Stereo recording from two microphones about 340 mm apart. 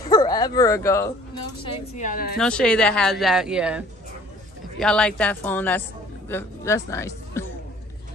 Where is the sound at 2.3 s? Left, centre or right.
Centre.